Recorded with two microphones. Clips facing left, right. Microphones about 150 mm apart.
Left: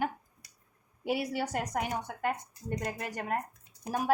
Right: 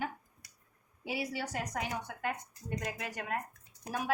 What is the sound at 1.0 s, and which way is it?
A woman's voice, 55° left (ahead or behind).